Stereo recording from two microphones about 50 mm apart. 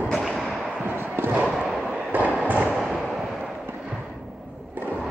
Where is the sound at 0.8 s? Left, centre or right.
Right.